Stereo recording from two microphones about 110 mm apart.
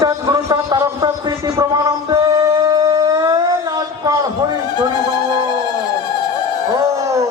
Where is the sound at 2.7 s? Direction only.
35° right (ahead or behind).